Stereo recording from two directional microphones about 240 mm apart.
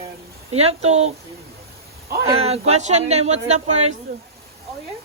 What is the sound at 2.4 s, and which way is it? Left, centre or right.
Speech, right.